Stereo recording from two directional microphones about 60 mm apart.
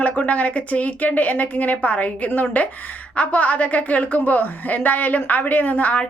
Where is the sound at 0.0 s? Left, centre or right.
Left.